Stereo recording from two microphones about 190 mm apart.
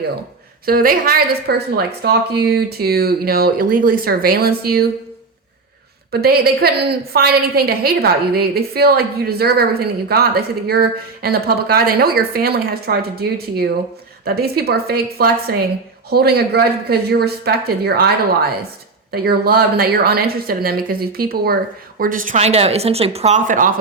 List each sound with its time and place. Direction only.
0.6 s a woman's voice: 50° right (ahead or behind)
6.1 s a woman's voice: 55° right (ahead or behind)